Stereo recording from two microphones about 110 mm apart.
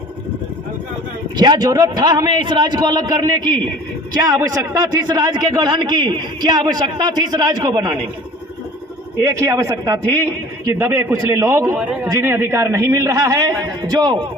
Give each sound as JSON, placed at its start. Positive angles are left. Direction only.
{"t": 1.4, "sound": "a man's voice", "side_deg": -40}
{"t": 9.2, "sound": "a man's voice", "side_deg": -30}